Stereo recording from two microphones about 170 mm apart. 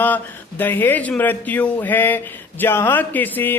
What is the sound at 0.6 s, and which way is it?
Speech, 10° left (ahead or behind).